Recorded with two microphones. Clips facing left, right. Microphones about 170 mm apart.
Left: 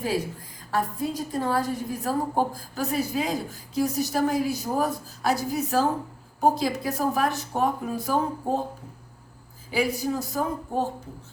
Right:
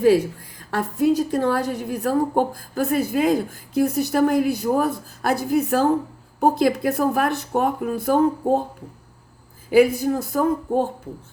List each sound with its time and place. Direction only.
0.7 s a woman's voice: 75° right (ahead or behind); by 8.6 s 60° right (ahead or behind)
9.7 s a woman's voice: 55° right (ahead or behind)